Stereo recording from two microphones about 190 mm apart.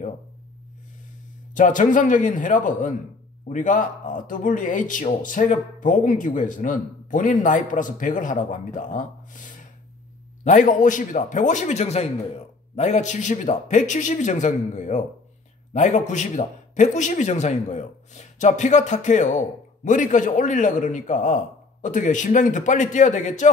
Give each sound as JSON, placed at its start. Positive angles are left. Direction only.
{"t": 1.5, "sound": "a man's voice", "side_deg": 45}